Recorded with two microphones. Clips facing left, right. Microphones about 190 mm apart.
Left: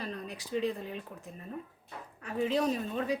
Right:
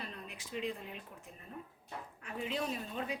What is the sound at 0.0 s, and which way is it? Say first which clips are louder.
A woman's voice: left 7 dB; 35° left (ahead or behind).